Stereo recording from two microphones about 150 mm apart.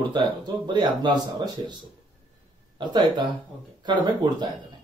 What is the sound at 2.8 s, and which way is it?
Speech, 30° right (ahead or behind).